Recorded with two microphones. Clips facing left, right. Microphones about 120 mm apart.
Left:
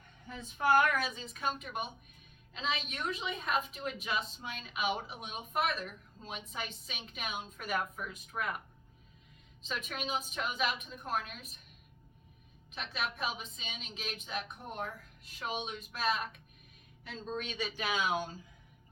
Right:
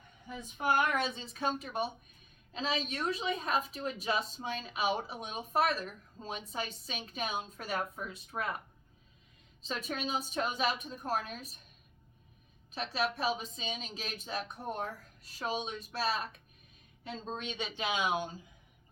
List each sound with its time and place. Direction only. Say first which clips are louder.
0.3 s a woman's voice: left 2 dB; 15° right (ahead or behind); by 8.6 s 30° right (ahead or behind)
9.6 s a woman's voice: right 2 dB; 35° right (ahead or behind)
12.7 s a woman's voice: right 5 dB; 35° right (ahead or behind); by 18.3 s 20° right (ahead or behind)